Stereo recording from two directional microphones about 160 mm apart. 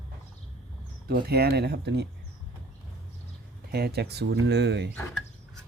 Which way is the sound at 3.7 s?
80° right.